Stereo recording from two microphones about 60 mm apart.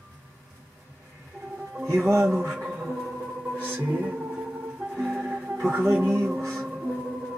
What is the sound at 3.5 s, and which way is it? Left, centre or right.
Music, right.